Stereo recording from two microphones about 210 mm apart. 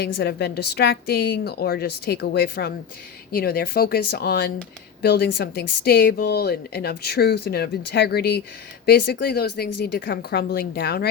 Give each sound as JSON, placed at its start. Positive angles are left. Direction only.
{"t": 0.0, "sound": "a woman's voice", "side_deg": 50}